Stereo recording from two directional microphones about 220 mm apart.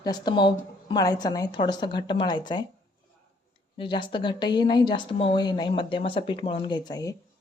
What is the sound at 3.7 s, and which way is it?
A woman's voice, 20° left (ahead or behind).